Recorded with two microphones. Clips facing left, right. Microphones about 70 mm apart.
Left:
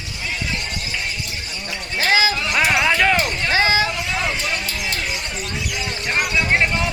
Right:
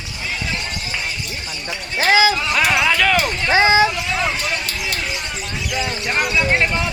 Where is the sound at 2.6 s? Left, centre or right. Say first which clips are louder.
Left 2 dB; centre.